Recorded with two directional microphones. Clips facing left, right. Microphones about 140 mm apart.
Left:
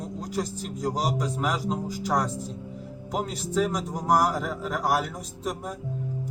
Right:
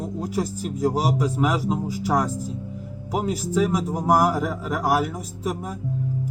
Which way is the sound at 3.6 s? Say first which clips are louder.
Right 5 dB; 5° right (ahead or behind).